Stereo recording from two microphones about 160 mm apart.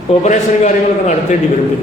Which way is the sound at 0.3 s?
50° left (ahead or behind).